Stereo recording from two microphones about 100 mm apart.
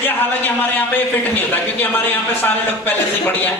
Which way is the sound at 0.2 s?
20° left (ahead or behind).